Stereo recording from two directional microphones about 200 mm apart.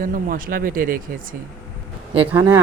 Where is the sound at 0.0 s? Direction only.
45° right (ahead or behind).